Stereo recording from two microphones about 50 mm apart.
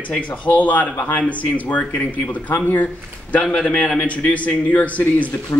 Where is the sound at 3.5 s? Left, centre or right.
Centre.